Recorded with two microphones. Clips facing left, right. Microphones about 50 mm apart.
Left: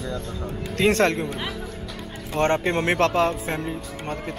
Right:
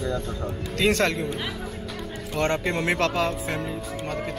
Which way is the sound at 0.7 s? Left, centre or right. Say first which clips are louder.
Left 3 dB; left.